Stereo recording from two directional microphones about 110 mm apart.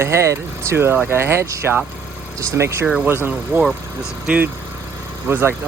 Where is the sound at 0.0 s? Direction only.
25° right (ahead or behind).